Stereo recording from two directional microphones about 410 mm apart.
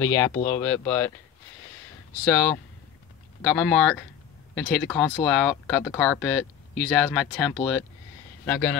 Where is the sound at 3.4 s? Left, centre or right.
Centre.